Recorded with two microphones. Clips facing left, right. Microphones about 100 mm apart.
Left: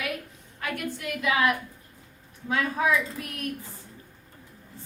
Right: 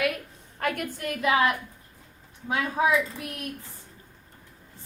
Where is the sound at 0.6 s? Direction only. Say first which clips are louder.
Right 3 dB; 45° right (ahead or behind).